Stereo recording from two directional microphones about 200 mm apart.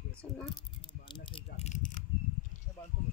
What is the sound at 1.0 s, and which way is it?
Rattle, 25° left (ahead or behind).